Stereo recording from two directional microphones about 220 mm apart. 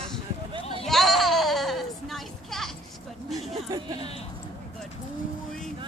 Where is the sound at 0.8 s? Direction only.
Centre (ahead or behind).